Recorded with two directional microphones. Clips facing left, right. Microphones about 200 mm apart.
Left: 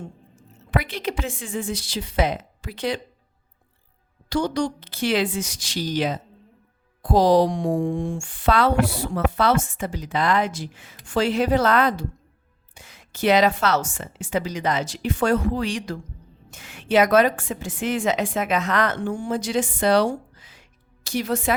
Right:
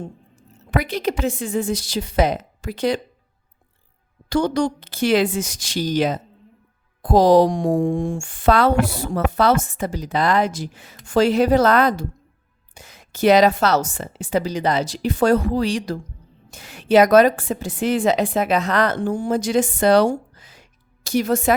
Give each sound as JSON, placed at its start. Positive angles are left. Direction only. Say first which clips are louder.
{"t": 0.0, "sound": "a woman's voice", "louder": "right 4 dB", "side_deg": -40}
{"t": 4.3, "sound": "a woman's voice", "louder": "right 4 dB", "side_deg": -55}